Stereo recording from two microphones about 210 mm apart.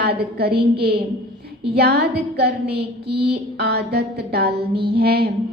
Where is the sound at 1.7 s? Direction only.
50° right (ahead or behind).